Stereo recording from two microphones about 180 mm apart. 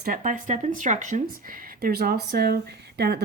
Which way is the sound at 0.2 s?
45° right (ahead or behind).